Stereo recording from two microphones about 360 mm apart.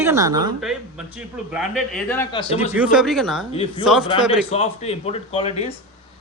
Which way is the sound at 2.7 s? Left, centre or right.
Centre.